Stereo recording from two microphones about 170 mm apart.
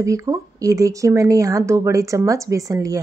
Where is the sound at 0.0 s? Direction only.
20° right (ahead or behind).